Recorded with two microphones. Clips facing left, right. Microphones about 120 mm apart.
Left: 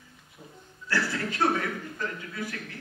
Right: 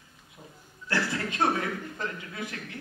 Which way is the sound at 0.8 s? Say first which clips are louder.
Even; 20° right (ahead or behind).